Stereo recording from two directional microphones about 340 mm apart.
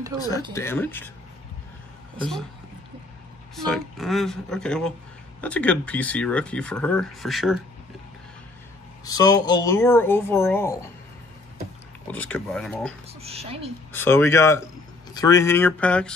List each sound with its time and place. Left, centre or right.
0.2 s speech: centre
3.5 s speech: centre
9.0 s speech: centre
12.1 s speech: centre
13.2 s speech: centre
13.9 s speech: centre